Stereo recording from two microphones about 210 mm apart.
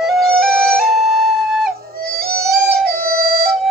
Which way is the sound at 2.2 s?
45° right (ahead or behind).